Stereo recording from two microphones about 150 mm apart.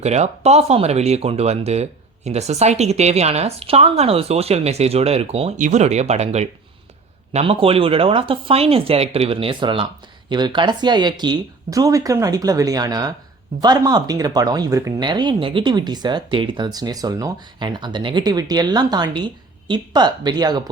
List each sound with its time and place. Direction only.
0.0 s speech: 45° right (ahead or behind)
5.5 s speech: 55° right (ahead or behind); by 20.6 s 30° right (ahead or behind)